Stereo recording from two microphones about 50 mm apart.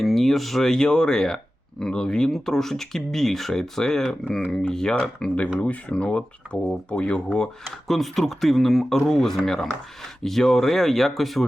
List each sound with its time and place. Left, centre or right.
0.0 s speech: centre
5.5 s speech: left
7.9 s speech: centre